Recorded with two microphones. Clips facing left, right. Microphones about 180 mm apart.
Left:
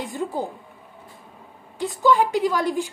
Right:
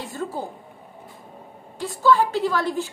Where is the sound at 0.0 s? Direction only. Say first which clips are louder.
Left 3 dB; 15° left (ahead or behind).